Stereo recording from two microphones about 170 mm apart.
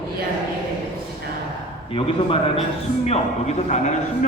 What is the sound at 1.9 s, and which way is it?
A man's voice, 30° left (ahead or behind).